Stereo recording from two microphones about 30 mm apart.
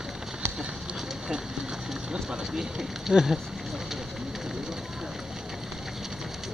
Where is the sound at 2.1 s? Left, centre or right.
Centre.